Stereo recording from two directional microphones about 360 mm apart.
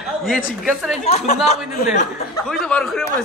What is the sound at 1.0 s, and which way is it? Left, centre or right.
Speech, centre.